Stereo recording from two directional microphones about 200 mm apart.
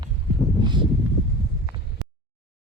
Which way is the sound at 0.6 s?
25° right (ahead or behind).